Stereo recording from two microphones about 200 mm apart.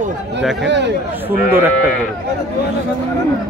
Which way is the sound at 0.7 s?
60° right (ahead or behind).